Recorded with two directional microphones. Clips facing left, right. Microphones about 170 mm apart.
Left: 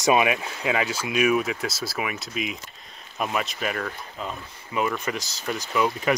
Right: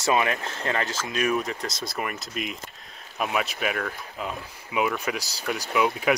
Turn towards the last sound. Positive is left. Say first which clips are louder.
# even
turn(degrees=-5)  # may be behind; listen again after turning